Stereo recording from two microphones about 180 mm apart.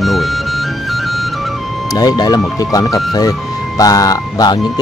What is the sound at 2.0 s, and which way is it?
Speech, 20° left (ahead or behind).